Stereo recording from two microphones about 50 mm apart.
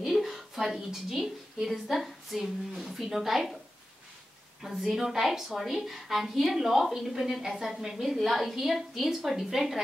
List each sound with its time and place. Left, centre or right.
0.0 s a woman's voice: centre
4.6 s a woman's voice: centre